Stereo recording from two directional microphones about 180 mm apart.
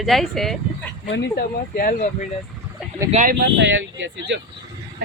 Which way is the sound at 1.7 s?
50° left (ahead or behind).